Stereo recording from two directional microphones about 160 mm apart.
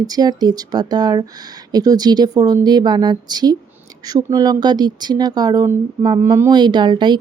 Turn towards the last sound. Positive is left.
turn(degrees=-30)  # may be behind; listen again after turning